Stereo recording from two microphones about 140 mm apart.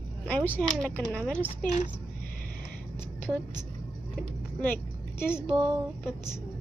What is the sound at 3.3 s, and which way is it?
Speech, 20° right (ahead or behind).